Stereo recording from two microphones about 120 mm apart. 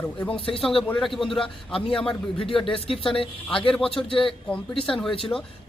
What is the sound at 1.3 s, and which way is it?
Speech, 45° left (ahead or behind).